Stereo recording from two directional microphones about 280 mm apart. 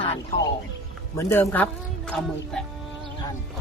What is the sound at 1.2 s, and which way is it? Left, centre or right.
Speech, centre.